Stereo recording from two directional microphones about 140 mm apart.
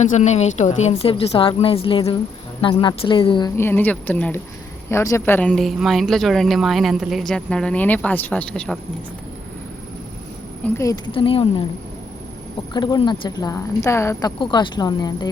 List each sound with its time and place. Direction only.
0.0 s a woman's voice: 60° left (ahead or behind); by 3.5 s 35° left (ahead or behind)
3.6 s a woman's voice: 15° left (ahead or behind)
10.8 s a woman's voice: 25° left (ahead or behind)
12.7 s a woman's voice: 30° left (ahead or behind)